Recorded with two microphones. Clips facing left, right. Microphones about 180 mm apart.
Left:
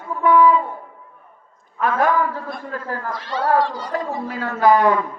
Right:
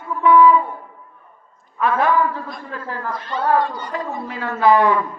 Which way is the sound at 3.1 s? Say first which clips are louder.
Even; 90° left.